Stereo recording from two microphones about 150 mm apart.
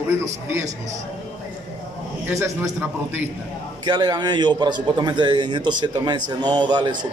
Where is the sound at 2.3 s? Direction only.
20° right (ahead or behind).